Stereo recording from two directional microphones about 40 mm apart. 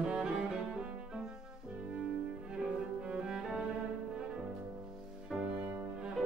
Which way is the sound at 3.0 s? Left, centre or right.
Centre.